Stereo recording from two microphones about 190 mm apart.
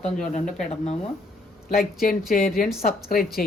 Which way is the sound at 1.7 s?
50° left (ahead or behind).